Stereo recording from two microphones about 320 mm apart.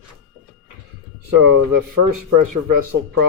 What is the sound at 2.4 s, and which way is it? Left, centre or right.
Speech, right.